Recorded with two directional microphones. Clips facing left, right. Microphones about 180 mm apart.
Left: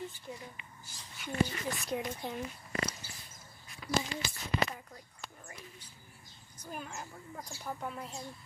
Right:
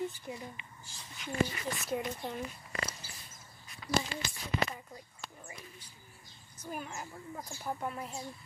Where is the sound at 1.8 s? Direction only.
Centre (ahead or behind).